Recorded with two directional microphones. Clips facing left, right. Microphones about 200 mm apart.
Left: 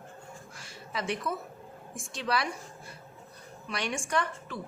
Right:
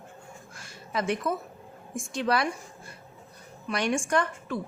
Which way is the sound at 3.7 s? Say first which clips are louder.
Right 6 dB; 50° right (ahead or behind).